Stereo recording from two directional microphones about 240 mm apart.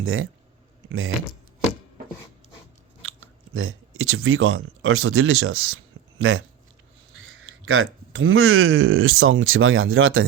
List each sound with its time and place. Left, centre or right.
0.0 s speech: right
3.0 s speech: right